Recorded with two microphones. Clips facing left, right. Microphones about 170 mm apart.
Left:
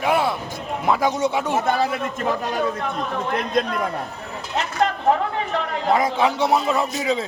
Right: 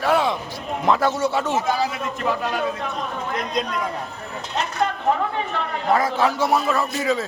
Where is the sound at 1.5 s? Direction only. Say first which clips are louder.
Left 2 dB; 55° left (ahead or behind).